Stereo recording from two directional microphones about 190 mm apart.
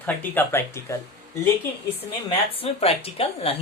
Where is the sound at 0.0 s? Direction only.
10° left (ahead or behind).